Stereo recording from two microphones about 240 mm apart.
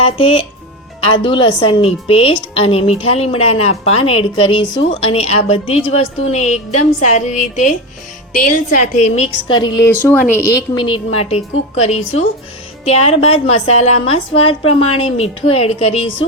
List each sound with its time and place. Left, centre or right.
0.0 s a woman's voice: left
10.8 s a woman's voice: left